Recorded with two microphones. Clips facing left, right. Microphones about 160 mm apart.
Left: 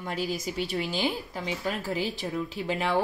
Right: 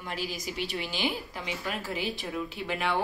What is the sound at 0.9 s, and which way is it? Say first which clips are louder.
A woman's voice: left 3 dB; 40° left (ahead or behind).